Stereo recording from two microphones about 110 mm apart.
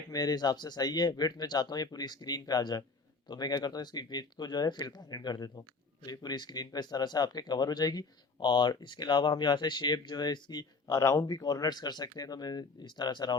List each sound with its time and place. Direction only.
0.1 s speech: 35° left (ahead or behind)